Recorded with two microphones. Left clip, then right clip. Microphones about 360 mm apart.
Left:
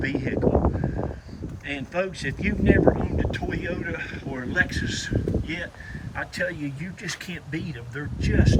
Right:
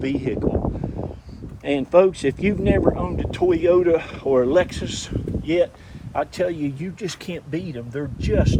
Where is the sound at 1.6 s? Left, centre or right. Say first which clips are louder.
Right 12 dB; centre.